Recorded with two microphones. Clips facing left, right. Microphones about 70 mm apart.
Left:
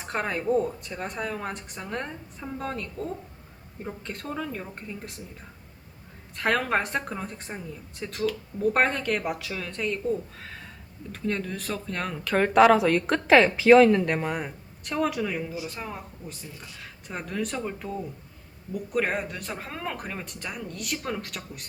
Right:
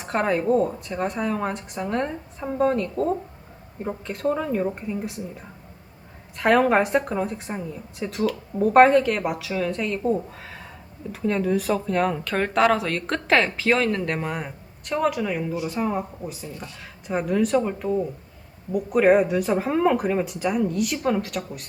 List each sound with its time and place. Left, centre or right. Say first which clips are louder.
0.0 s speech: right 6 dB; centre
4.0 s speech: right 10 dB; centre
10.4 s a sound: right 2 dB; centre
11.1 s speech: right 8 dB; centre
15.8 s speech: right 11 dB; centre
16.3 s speech: right 6 dB; centre
18.9 s speech: right 11 dB; centre